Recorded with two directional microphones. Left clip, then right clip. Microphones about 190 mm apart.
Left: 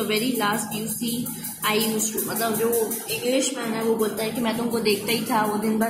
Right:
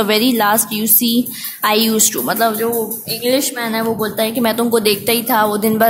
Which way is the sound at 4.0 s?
55° right (ahead or behind).